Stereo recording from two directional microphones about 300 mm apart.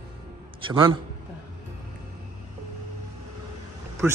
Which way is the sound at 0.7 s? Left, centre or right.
Centre.